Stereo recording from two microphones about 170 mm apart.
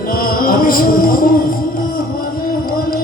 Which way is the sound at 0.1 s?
60° left (ahead or behind).